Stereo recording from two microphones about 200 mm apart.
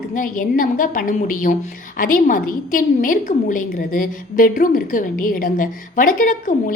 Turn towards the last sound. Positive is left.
turn(degrees=40)  # may be behind; listen again after turning